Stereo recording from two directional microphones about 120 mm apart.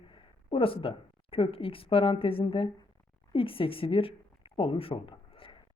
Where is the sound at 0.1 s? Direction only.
50° left (ahead or behind).